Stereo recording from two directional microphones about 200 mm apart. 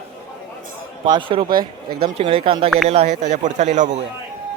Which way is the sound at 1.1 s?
25° right (ahead or behind).